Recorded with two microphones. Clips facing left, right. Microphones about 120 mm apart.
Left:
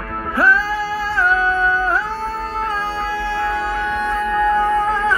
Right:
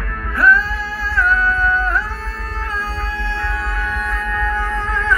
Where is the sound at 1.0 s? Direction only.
30° left (ahead or behind).